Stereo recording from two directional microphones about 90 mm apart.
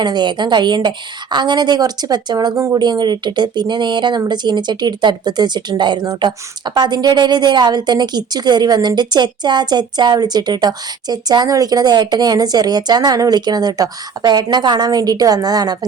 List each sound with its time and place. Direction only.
0.0 s a woman's voice: 55° right (ahead or behind)